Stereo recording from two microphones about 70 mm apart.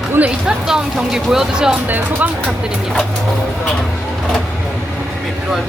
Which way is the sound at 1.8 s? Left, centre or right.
Right.